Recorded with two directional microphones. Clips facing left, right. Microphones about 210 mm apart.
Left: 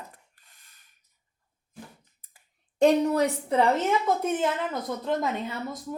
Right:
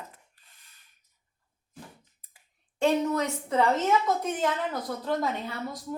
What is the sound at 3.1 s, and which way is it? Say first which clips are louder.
Speech: left 3 dB; 35° left (ahead or behind).